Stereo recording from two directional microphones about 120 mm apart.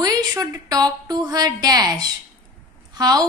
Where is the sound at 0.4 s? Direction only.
30° right (ahead or behind).